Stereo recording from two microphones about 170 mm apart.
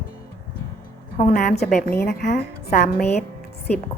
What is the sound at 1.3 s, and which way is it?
Speech, 55° left (ahead or behind).